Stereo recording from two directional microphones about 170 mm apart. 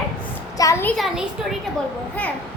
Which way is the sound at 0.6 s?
15° left (ahead or behind).